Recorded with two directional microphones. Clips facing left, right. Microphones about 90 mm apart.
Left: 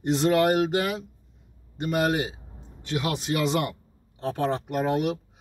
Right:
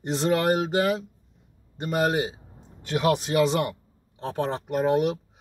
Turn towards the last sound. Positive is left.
turn(degrees=-25)  # may be behind; listen again after turning